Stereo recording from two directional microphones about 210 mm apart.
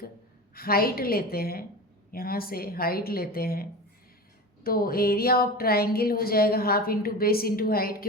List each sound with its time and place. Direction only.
0.5 s a woman's voice: 45° left (ahead or behind)